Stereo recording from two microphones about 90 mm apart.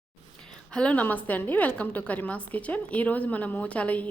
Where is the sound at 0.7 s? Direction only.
10° left (ahead or behind).